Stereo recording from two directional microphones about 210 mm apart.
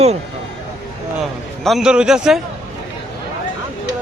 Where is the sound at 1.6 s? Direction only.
Centre (ahead or behind).